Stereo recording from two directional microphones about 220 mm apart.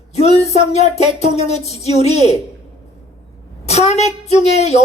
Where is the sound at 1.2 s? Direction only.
30° left (ahead or behind).